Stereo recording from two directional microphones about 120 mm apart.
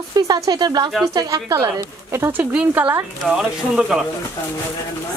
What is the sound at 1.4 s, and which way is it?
Speech, 20° right (ahead or behind).